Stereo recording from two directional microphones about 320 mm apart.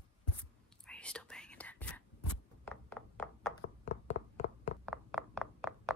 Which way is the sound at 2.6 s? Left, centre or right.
Centre.